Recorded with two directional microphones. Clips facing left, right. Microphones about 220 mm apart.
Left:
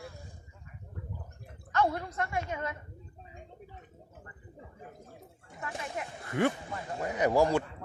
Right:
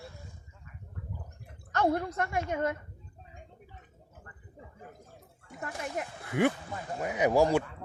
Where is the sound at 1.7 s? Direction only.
50° right (ahead or behind).